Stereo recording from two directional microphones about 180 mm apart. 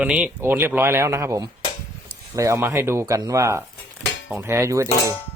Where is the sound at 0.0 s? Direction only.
5° right (ahead or behind).